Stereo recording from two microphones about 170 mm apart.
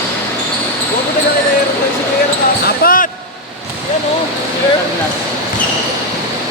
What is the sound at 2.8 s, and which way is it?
Basketball bounce, 55° left (ahead or behind).